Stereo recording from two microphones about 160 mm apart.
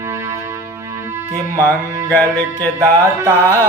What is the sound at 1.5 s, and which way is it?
Music, 15° left (ahead or behind).